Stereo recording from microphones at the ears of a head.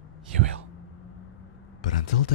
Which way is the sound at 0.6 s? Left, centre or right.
Left.